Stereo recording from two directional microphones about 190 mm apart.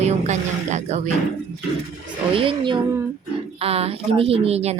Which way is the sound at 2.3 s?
25° right (ahead or behind).